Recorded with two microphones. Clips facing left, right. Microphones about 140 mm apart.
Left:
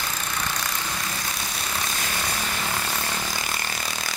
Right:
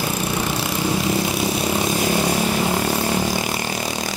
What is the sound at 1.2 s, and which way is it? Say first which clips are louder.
Vehicle: right 12 dB; 20° right (ahead or behind).